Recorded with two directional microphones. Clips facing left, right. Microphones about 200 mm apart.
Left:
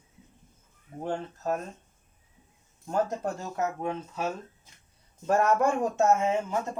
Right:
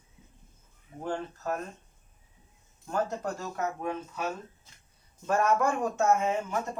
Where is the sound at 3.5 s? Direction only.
25° left (ahead or behind).